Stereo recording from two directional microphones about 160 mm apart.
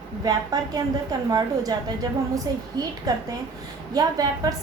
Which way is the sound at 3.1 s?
25° right (ahead or behind).